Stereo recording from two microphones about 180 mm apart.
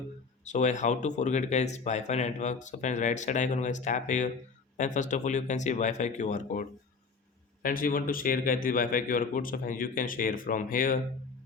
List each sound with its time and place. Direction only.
0.4 s a man's voice: 40° left (ahead or behind)